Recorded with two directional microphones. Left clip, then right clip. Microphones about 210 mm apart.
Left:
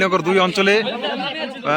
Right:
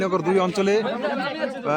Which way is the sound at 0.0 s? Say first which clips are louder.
Left 5 dB; centre (ahead or behind).